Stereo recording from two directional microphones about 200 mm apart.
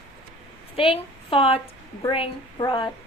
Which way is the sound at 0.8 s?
25° left (ahead or behind).